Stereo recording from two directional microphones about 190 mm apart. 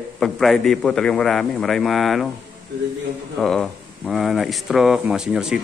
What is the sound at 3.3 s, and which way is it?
Speech, centre (ahead or behind).